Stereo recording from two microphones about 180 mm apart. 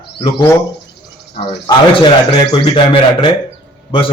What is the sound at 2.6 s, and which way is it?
Speech, 30° left (ahead or behind).